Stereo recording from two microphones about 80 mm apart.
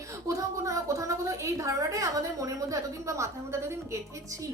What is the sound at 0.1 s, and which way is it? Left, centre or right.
A woman's voice, right.